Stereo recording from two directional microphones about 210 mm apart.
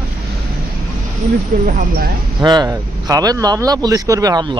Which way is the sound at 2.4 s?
20° right (ahead or behind).